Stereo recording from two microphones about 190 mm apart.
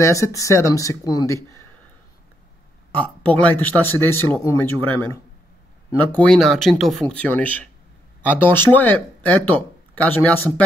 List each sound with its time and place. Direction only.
0.0 s speech: 15° left (ahead or behind)
2.9 s speech: 10° left (ahead or behind)
6.1 s speech: 5° left (ahead or behind)